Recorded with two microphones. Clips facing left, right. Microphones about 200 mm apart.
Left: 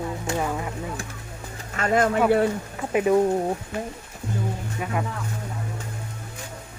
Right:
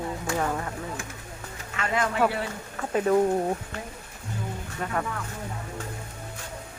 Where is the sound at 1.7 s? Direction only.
45° left (ahead or behind).